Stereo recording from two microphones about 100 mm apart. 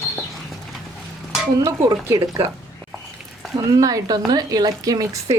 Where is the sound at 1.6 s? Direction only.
30° right (ahead or behind).